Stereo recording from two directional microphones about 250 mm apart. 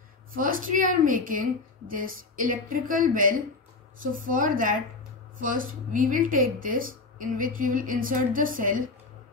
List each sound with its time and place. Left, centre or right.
0.3 s speech: right